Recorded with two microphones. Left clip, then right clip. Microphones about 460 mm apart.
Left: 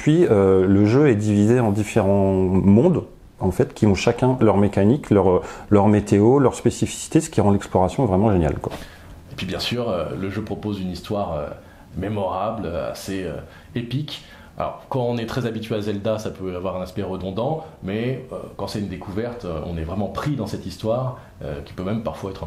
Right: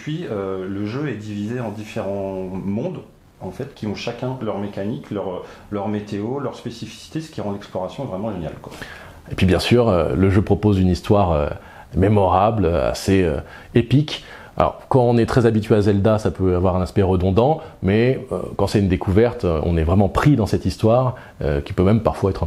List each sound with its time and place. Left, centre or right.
0.0 s speech: left
9.3 s speech: right